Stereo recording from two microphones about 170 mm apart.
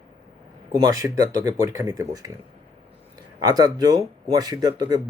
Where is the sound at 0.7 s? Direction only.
20° right (ahead or behind).